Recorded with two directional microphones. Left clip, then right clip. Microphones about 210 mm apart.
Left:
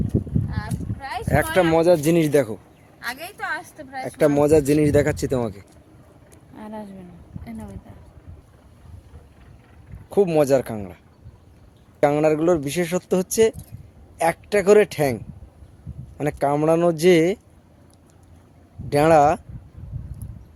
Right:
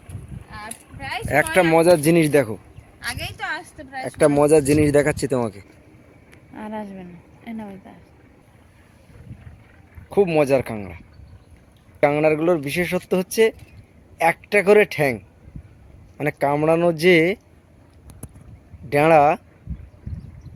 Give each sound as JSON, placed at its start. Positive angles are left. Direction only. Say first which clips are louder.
{"t": 1.0, "sound": "speech", "louder": "right 2 dB", "side_deg": 0}
{"t": 6.6, "sound": "a sound", "louder": "right 4 dB", "side_deg": -20}
{"t": 10.1, "sound": "speech", "louder": "even", "side_deg": 5}
{"t": 18.9, "sound": "speech", "louder": "right 1 dB", "side_deg": 5}